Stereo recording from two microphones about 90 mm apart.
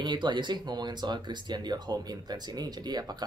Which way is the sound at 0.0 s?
60° right (ahead or behind).